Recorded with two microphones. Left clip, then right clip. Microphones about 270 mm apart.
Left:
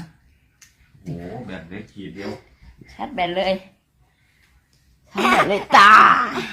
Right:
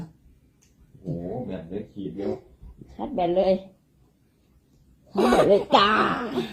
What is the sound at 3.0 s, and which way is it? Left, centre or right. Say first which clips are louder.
Speech: left 1 dB; left.